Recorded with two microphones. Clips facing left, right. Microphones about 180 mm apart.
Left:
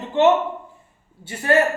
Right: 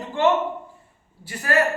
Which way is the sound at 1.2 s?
25° left (ahead or behind).